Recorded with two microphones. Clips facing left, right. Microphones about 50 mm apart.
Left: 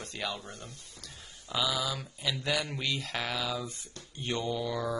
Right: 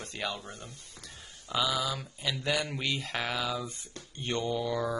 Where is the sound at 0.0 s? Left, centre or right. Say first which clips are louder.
Right 1 dB; centre.